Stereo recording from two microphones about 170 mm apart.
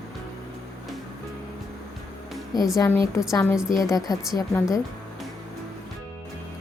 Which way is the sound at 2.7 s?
15° left (ahead or behind).